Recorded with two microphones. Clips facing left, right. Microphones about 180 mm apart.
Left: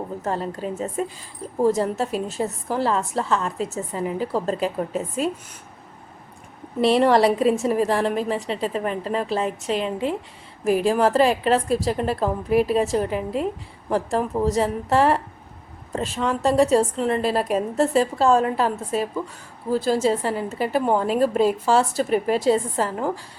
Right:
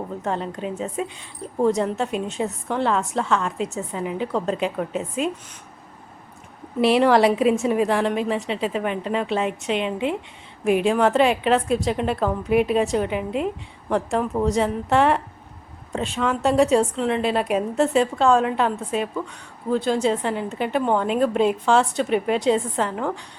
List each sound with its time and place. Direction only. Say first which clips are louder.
0.2 s a woman's voice: even; centre (ahead or behind)
6.8 s a woman's voice: even; centre (ahead or behind)